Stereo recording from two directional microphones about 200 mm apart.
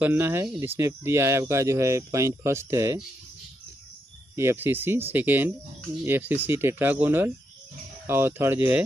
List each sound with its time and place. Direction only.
0.0 s speech: 10° right (ahead or behind)
4.4 s speech: 10° right (ahead or behind)